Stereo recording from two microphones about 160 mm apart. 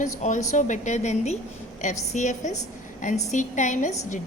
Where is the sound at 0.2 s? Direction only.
50° left (ahead or behind).